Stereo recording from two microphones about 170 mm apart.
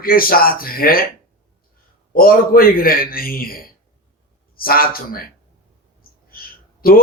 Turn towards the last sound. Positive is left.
turn(degrees=60)  # may be behind; listen again after turning